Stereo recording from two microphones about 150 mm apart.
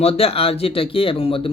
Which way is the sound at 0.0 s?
40° left (ahead or behind).